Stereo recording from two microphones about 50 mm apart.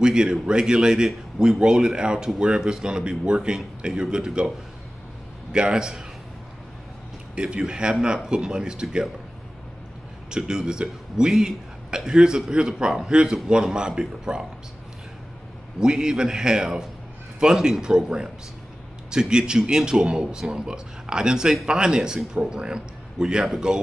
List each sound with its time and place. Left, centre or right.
0.0 s a man's voice: centre
5.5 s a man's voice: centre
7.3 s a man's voice: centre
10.3 s a man's voice: centre
15.8 s a man's voice: centre